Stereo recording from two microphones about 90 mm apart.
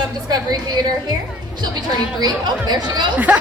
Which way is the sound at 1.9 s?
50° right (ahead or behind).